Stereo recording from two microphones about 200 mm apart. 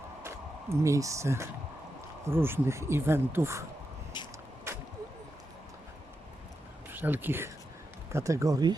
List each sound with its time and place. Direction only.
0.2 s speech: 15° right (ahead or behind)
4.7 s a sound: 10° right (ahead or behind)
6.9 s speech: 10° right (ahead or behind)